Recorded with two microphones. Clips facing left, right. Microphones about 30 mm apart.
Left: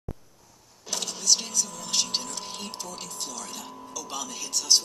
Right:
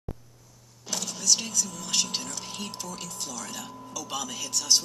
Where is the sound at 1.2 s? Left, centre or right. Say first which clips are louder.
Even; left.